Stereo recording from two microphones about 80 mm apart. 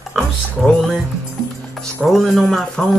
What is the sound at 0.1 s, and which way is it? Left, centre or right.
Speech, centre.